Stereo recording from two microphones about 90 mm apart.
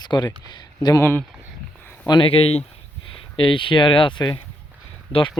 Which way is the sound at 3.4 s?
70° left (ahead or behind).